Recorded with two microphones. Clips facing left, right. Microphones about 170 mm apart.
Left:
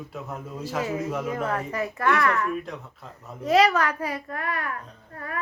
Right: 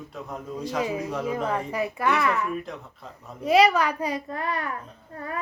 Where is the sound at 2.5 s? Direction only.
Centre (ahead or behind).